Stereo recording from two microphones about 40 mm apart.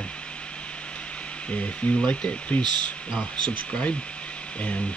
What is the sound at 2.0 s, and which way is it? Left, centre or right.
Speech, left.